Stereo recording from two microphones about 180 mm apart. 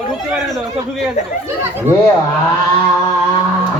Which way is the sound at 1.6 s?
10° right (ahead or behind).